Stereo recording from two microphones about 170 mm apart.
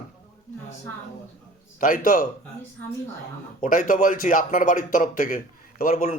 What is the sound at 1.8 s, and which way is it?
Speech, 50° left (ahead or behind).